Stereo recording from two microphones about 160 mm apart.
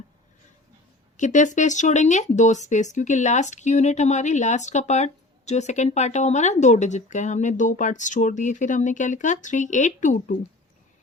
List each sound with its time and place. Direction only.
1.1 s speech: 50° left (ahead or behind)